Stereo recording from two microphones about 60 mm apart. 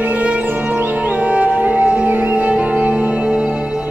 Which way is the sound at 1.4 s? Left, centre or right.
Right.